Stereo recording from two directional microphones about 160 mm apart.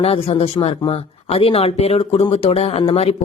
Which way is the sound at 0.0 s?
40° left (ahead or behind).